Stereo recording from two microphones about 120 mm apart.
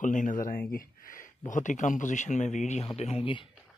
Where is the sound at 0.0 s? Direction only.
90° left.